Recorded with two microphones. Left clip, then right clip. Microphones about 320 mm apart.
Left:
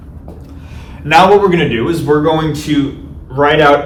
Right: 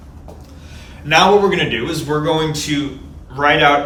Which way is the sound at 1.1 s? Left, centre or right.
Centre.